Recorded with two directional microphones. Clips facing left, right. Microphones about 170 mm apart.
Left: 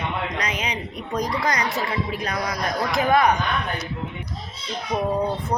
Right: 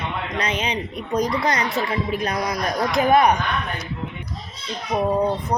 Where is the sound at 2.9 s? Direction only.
20° right (ahead or behind).